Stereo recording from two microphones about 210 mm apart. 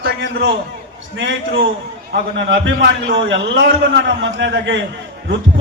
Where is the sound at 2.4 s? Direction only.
60° right (ahead or behind).